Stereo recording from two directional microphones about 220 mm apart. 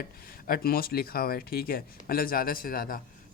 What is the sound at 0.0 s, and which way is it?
Speech, 40° left (ahead or behind).